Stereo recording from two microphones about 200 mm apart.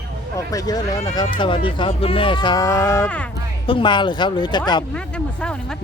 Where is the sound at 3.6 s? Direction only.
25° left (ahead or behind).